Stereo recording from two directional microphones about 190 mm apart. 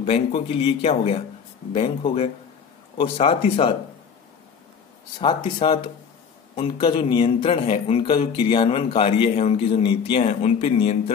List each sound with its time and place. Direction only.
0.0 s a man's voice: 30° left (ahead or behind)
5.2 s a man's voice: 25° left (ahead or behind)